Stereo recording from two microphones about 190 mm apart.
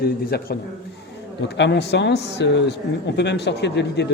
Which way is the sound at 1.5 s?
65° left (ahead or behind).